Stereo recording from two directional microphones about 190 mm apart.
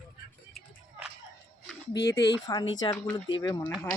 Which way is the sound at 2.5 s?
20° left (ahead or behind).